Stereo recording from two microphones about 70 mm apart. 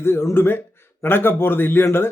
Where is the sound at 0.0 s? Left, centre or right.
Left.